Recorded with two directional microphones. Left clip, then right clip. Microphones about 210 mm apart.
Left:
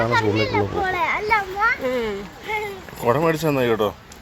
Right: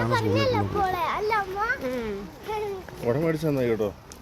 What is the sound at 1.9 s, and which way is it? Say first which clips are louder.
Speech: left 7 dB; 20° left (ahead or behind).